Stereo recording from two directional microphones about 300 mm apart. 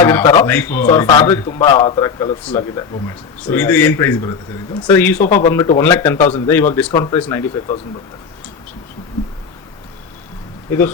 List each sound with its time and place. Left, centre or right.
0.0 s a man's voice: centre
5.2 s speech: left
5.5 s a man's voice: centre
6.1 s speech: left
6.5 s a man's voice: centre
10.7 s a man's voice: centre